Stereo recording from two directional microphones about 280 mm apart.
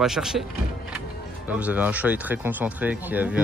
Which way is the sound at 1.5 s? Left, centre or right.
Centre.